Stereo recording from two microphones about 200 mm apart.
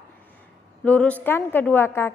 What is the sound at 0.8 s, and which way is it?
A woman's voice, 5° left (ahead or behind).